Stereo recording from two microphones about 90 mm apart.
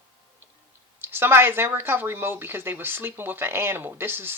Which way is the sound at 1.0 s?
25° right (ahead or behind).